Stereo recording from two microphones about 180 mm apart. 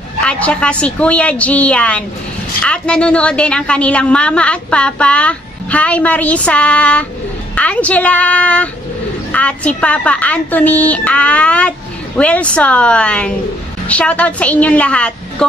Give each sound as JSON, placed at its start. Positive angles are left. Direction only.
{"t": 0.2, "sound": "a woman's voice", "side_deg": 5}